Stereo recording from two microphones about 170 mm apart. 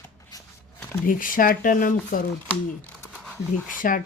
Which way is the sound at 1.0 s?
55° left (ahead or behind).